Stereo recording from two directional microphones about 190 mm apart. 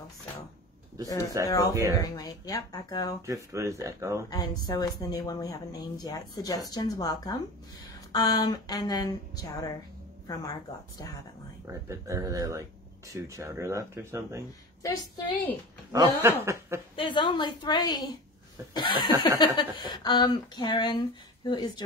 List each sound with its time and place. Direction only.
1.0 s a woman's voice: 20° left (ahead or behind)
1.7 s speech: 15° right (ahead or behind)
2.0 s speech: 20° left (ahead or behind)
3.2 s speech: 15° right (ahead or behind)
4.3 s speech: 20° left (ahead or behind)
11.6 s speech: 15° right (ahead or behind)
14.8 s a woman's voice: 15° left (ahead or behind)
15.9 s speech: 15° right (ahead or behind)
16.9 s speech: 25° left (ahead or behind)